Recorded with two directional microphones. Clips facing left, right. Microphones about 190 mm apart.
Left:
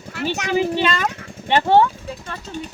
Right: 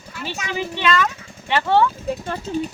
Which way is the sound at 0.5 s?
35° left (ahead or behind).